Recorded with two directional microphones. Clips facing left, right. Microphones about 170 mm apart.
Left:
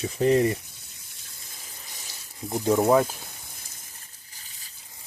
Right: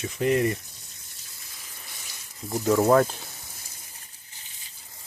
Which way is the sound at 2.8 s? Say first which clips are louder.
Right 1 dB; centre (ahead or behind).